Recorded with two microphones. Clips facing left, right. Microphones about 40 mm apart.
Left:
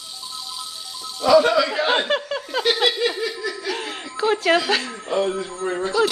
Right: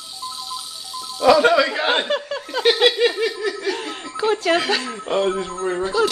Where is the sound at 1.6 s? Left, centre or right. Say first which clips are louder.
Right 1 dB; centre.